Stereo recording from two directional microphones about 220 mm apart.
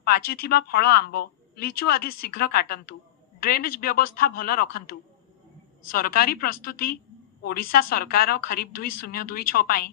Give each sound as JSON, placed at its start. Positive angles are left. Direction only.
{"t": 0.0, "sound": "a woman's voice", "side_deg": 45}